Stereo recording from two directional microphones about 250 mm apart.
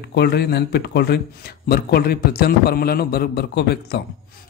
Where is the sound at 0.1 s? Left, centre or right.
Left.